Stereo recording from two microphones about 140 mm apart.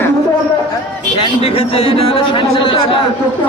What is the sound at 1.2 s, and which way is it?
A man's voice, 45° left (ahead or behind).